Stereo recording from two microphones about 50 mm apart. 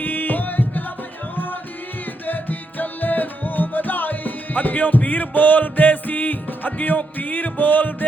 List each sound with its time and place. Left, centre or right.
0.0 s music: left
2.2 s music: left